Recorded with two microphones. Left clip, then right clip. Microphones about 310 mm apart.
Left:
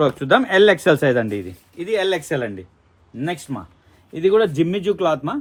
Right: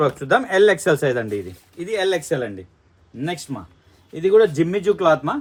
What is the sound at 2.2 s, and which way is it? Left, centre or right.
A man's voice, centre.